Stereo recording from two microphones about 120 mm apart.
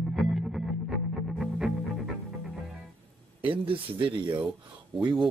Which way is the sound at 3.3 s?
45° right (ahead or behind).